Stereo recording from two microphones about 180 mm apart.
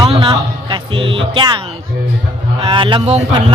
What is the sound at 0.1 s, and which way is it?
A man's voice, 30° right (ahead or behind).